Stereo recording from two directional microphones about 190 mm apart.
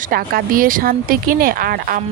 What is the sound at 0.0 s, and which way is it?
Speech, 50° right (ahead or behind).